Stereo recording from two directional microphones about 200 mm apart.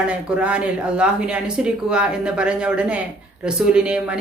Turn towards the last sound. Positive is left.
turn(degrees=-5)  # may be behind; listen again after turning